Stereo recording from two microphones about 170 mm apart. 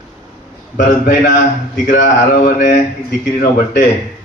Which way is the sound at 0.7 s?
50° left (ahead or behind).